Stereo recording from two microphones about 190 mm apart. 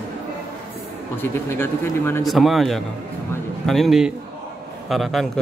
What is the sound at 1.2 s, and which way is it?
Speech, 10° left (ahead or behind).